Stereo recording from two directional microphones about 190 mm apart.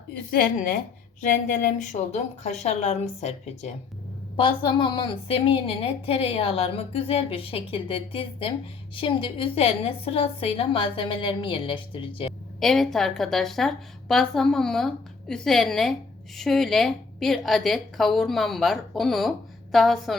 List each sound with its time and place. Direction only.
0.3 s a woman's voice: 50° left (ahead or behind); by 12.3 s 25° left (ahead or behind)
12.5 s a woman's voice: centre (ahead or behind)